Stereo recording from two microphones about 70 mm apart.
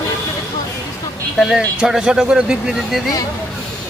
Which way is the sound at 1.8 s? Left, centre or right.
Centre.